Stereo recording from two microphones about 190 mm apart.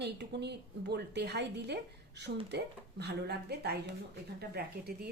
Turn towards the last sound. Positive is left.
turn(degrees=-55)  # may be behind; listen again after turning